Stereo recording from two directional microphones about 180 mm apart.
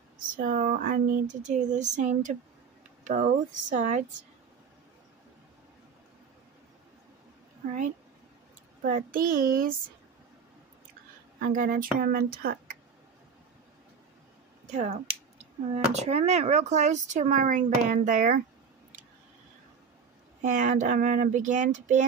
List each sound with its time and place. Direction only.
0.4 s speech: 45° right (ahead or behind)
8.8 s speech: 50° right (ahead or behind)
11.3 s speech: 50° right (ahead or behind)
14.7 s speech: 40° right (ahead or behind)
20.4 s speech: 45° right (ahead or behind)